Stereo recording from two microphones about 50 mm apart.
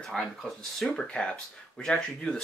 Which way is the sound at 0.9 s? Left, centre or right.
Centre.